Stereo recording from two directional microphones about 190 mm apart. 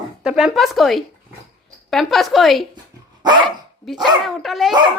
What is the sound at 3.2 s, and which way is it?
Dog, 25° right (ahead or behind).